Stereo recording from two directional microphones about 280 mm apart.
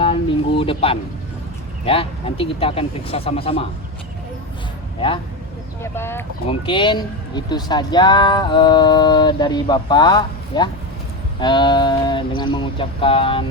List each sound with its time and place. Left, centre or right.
0.0 s a sound: centre
1.8 s speech: centre
4.9 s speech: centre
5.8 s speech: centre